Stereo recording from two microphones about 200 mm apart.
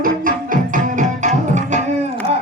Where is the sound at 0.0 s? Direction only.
45° right (ahead or behind).